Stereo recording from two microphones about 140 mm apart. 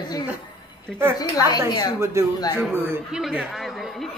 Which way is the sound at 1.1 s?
25° left (ahead or behind).